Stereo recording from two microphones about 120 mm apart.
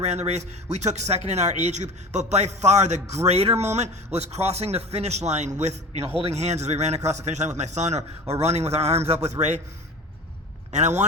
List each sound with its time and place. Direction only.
0.0 s a man's voice: 65° right (ahead or behind)
3.2 s a man's voice: 60° right (ahead or behind)
10.7 s a man's voice: 75° right (ahead or behind)